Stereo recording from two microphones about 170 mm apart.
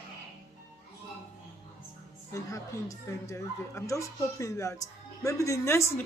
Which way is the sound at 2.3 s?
20° left (ahead or behind).